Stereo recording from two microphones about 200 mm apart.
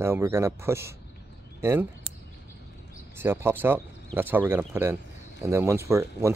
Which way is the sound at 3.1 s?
10° right (ahead or behind).